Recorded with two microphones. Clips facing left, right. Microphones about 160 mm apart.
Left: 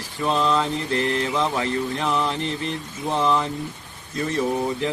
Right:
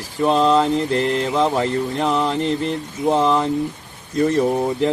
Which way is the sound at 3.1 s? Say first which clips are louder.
Right 5 dB; 30° right (ahead or behind).